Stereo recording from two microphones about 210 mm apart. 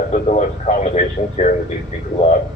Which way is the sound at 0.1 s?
35° left (ahead or behind).